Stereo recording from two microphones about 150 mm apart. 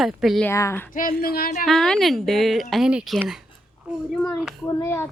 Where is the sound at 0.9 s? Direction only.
75° left (ahead or behind).